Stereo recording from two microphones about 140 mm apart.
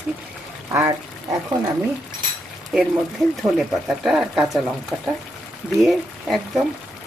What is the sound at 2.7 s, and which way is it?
Speech, 5° right (ahead or behind).